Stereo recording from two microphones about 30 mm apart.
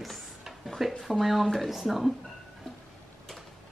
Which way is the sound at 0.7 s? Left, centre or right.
Centre.